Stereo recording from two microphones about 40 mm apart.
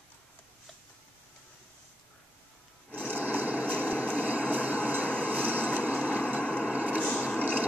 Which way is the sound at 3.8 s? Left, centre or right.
Right.